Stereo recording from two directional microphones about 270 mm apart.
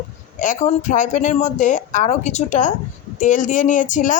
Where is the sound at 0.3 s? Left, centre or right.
Left.